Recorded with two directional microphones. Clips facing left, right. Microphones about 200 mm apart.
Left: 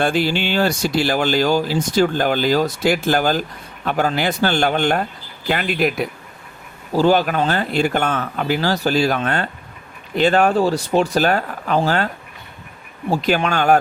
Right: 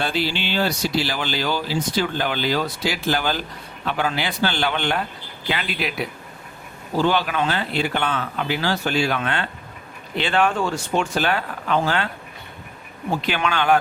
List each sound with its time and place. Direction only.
0.0 s speech: 50° left (ahead or behind)